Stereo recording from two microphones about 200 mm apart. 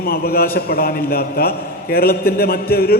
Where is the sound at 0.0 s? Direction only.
50° left (ahead or behind).